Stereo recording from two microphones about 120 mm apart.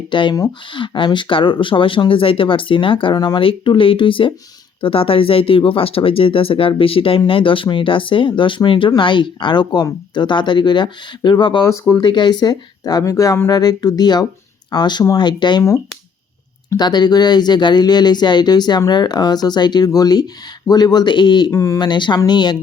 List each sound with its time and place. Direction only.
0.1 s speech: 40° left (ahead or behind)
11.6 s speech: 25° left (ahead or behind)
11.9 s speech: 40° left (ahead or behind)
16.6 s speech: 35° left (ahead or behind)
21.5 s speech: 25° left (ahead or behind)
21.8 s speech: 40° left (ahead or behind)